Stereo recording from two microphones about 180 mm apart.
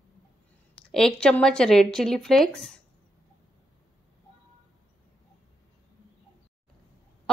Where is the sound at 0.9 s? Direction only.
5° left (ahead or behind).